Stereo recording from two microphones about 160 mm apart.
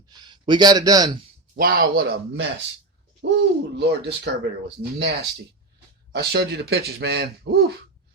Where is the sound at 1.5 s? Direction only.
60° right (ahead or behind).